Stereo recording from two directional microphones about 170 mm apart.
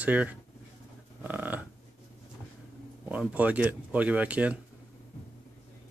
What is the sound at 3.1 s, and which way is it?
Speech, 10° right (ahead or behind).